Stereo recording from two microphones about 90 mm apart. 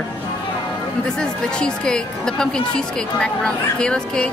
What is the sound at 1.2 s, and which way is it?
Speech, 10° left (ahead or behind).